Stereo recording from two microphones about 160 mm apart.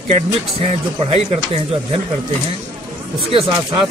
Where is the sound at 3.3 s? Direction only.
35° right (ahead or behind).